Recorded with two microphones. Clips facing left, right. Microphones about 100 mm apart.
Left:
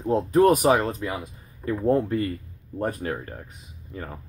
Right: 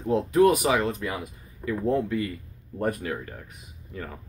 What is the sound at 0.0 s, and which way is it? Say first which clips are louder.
Speech: left 1 dB; 35° left (ahead or behind).